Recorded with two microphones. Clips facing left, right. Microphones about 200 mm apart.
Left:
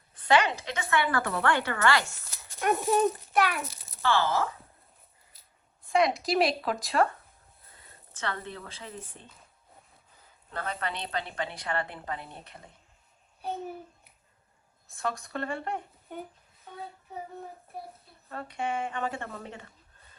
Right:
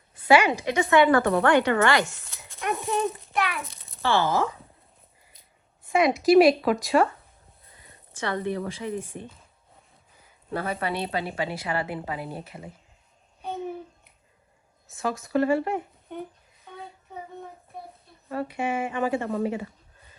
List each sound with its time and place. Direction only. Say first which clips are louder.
0.1 s a woman's voice: right 5 dB; 10° right (ahead or behind)
2.6 s a child's voice: left 2 dB; centre (ahead or behind)
4.0 s speech: right 3 dB; 15° right (ahead or behind)
5.8 s speech: right 4 dB; centre (ahead or behind)
7.7 s speech: right 2 dB; 15° right (ahead or behind)
10.5 s speech: right 6 dB; 10° right (ahead or behind)
13.4 s a sound: right 3 dB; centre (ahead or behind)
14.8 s a woman's voice: right 4 dB; centre (ahead or behind)
17.7 s a sound: even; 5° left (ahead or behind)
18.3 s speech: right 5 dB; 5° right (ahead or behind)